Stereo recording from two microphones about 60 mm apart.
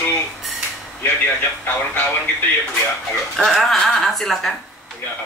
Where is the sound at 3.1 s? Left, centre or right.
Centre.